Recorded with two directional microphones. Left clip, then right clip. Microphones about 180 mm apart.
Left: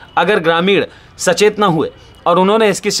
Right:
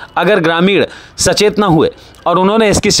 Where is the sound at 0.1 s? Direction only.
40° right (ahead or behind).